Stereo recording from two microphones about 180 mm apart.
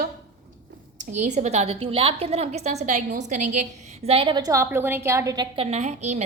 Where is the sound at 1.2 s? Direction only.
40° right (ahead or behind).